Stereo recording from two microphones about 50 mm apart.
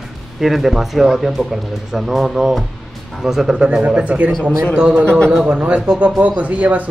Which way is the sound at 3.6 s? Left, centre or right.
Right.